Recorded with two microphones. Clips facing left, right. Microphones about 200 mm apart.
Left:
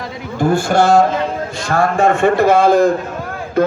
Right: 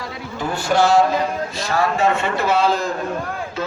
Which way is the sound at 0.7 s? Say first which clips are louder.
Left 1 dB; 50° left (ahead or behind).